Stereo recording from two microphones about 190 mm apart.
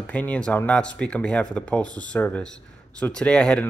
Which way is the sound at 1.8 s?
20° right (ahead or behind).